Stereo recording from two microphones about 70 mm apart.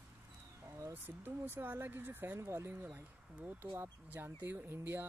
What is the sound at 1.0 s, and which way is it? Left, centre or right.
Speech, right.